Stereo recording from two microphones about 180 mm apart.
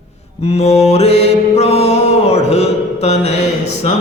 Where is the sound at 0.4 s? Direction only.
35° left (ahead or behind).